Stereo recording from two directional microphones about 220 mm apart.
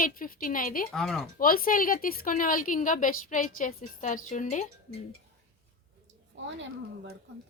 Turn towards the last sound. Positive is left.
turn(degrees=-55)  # may be behind; listen again after turning